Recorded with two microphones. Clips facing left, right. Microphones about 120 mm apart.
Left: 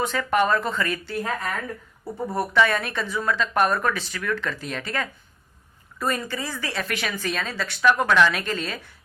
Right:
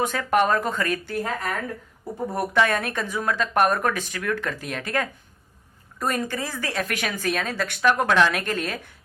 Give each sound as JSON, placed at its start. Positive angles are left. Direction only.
{"t": 0.0, "sound": "speech", "side_deg": -45}
{"t": 2.3, "sound": "speech", "side_deg": -50}